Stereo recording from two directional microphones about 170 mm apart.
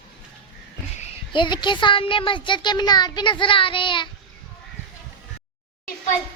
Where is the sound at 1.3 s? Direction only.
25° left (ahead or behind).